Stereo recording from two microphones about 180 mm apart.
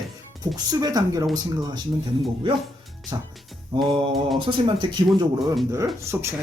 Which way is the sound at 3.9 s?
30° right (ahead or behind).